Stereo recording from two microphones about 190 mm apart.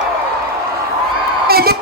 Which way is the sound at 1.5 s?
55° right (ahead or behind).